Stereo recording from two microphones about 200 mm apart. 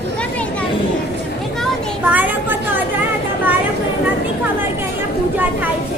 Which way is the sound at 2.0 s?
10° right (ahead or behind).